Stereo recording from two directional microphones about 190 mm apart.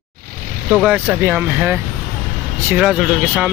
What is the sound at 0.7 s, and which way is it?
Speech, 5° right (ahead or behind).